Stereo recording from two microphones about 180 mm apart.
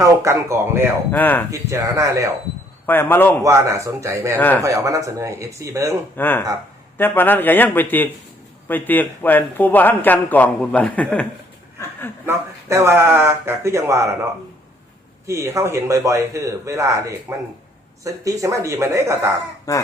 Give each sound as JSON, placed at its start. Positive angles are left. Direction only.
{"t": 0.0, "sound": "a man's voice", "side_deg": -15}
{"t": 1.1, "sound": "a man's voice", "side_deg": 10}
{"t": 1.5, "sound": "a man's voice", "side_deg": -15}
{"t": 2.8, "sound": "a man's voice", "side_deg": 10}
{"t": 3.4, "sound": "a man's voice", "side_deg": -15}
{"t": 4.4, "sound": "a man's voice", "side_deg": 10}
{"t": 4.6, "sound": "a man's voice", "side_deg": -20}
{"t": 6.1, "sound": "a man's voice", "side_deg": 10}
{"t": 12.2, "sound": "a man's voice", "side_deg": -15}
{"t": 15.3, "sound": "a man's voice", "side_deg": -15}
{"t": 19.7, "sound": "a man's voice", "side_deg": 15}